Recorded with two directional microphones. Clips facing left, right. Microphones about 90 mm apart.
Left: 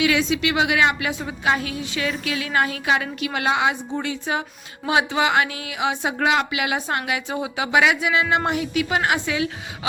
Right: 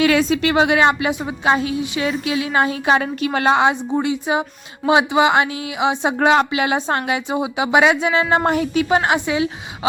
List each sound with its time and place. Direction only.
0.0 s a woman's voice: 45° right (ahead or behind)
3.9 s speech: 20° right (ahead or behind)
6.1 s a woman's voice: 35° right (ahead or behind)